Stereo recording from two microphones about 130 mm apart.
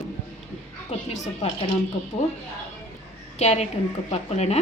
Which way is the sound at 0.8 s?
60° left (ahead or behind).